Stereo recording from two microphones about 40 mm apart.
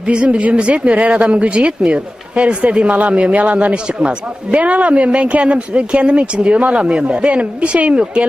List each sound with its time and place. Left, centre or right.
0.1 s speech: right